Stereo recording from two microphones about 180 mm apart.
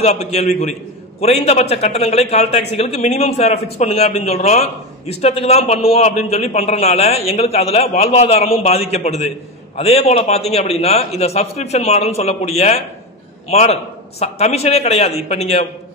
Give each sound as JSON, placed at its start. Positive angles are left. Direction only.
{"t": 0.0, "sound": "a man's voice", "side_deg": 40}